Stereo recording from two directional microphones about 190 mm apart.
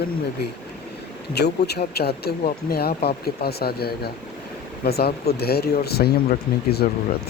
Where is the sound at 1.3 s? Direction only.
60° left (ahead or behind).